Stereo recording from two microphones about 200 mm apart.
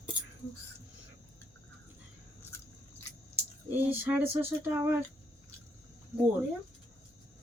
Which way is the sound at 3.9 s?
10° right (ahead or behind).